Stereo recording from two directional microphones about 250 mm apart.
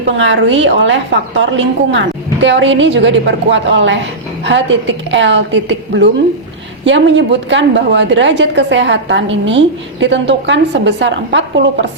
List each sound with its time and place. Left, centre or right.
0.2 s a woman's voice: right